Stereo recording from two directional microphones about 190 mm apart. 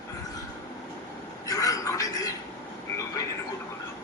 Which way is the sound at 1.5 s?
20° left (ahead or behind).